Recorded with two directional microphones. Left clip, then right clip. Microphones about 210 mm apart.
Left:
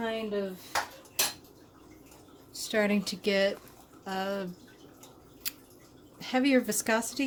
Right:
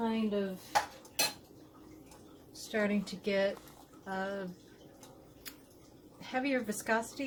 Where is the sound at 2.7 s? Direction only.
55° left (ahead or behind).